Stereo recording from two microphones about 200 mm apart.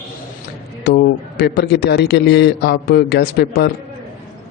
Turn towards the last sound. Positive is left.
turn(degrees=55)  # may be behind; listen again after turning